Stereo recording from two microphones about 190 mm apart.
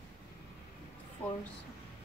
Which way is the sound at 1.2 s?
10° left (ahead or behind).